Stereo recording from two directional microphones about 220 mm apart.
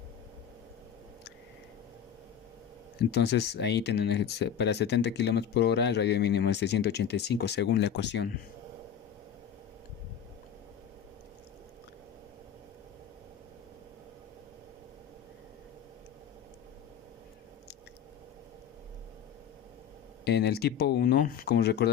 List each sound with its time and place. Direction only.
3.0 s speech: 50° left (ahead or behind)
20.2 s speech: 50° left (ahead or behind)